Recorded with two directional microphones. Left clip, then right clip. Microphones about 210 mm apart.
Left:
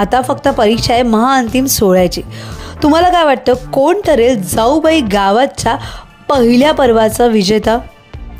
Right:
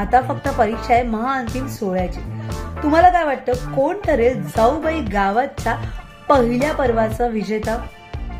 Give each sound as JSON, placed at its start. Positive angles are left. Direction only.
{"t": 0.0, "sound": "a woman's voice", "side_deg": 40}